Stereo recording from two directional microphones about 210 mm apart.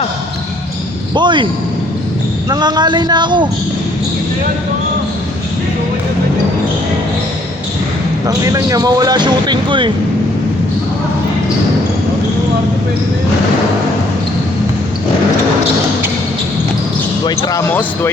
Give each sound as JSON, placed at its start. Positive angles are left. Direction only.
{"t": 1.1, "sound": "speech", "side_deg": -20}
{"t": 2.5, "sound": "speech", "side_deg": -20}
{"t": 8.3, "sound": "speech", "side_deg": -15}
{"t": 17.2, "sound": "speech", "side_deg": 20}
{"t": 17.7, "sound": "speech", "side_deg": 10}